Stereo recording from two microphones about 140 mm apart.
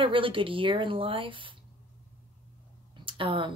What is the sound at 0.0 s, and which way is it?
Speech, 40° right (ahead or behind).